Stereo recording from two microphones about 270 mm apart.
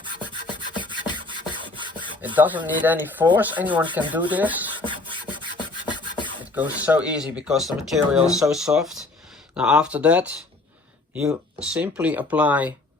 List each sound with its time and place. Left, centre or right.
0.3 s rub: centre
2.2 s speech: centre
4.8 s rub: centre
6.4 s speech: centre